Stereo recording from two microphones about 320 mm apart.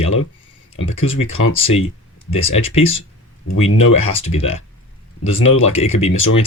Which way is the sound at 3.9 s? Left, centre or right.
Centre.